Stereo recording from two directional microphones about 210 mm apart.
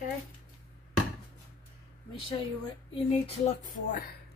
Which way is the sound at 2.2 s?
25° left (ahead or behind).